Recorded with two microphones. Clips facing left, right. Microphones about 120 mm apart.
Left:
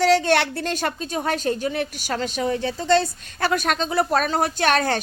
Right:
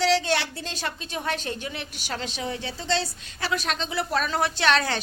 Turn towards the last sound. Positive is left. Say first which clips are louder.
# left 3 dB
turn(degrees=50)  # may be behind; listen again after turning